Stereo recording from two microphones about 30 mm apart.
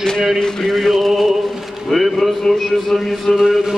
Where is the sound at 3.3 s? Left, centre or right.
Centre.